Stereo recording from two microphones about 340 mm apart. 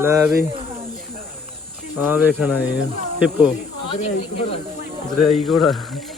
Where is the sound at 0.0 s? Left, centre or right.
Centre.